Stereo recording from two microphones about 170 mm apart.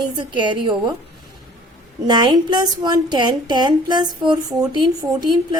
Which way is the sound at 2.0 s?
25° right (ahead or behind).